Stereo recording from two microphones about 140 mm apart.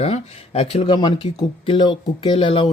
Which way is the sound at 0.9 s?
30° left (ahead or behind).